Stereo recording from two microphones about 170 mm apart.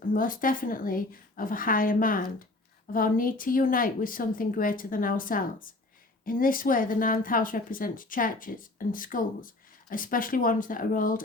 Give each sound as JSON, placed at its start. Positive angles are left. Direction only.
{"t": 0.1, "sound": "speech", "side_deg": 55}